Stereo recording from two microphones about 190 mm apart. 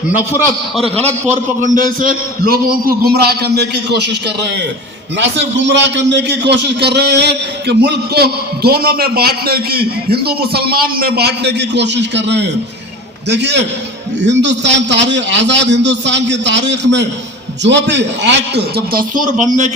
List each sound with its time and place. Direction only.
1.6 s a man's voice: 45° right (ahead or behind)